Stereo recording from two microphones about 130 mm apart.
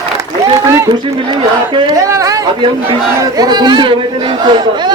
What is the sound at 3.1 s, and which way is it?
Speech, 30° right (ahead or behind).